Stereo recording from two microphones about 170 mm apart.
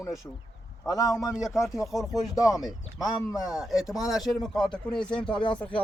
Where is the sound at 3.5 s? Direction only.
Centre (ahead or behind).